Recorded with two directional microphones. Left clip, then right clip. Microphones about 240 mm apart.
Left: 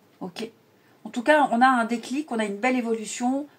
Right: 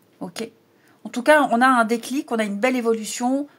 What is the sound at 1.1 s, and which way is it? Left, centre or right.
Speech, right.